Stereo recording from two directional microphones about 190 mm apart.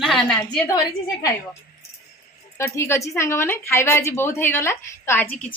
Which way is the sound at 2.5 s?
15° left (ahead or behind).